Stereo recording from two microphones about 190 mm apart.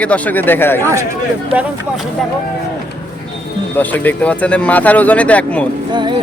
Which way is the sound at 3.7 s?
10° left (ahead or behind).